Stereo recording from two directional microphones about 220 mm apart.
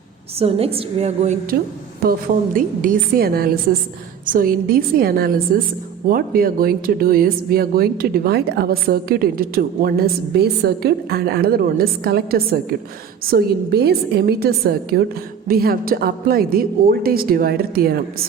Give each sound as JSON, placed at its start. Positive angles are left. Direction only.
{"t": 0.3, "sound": "a woman's voice", "side_deg": -25}